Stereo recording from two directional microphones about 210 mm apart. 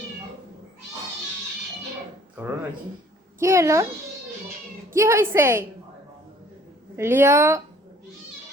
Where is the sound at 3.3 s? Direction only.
15° right (ahead or behind).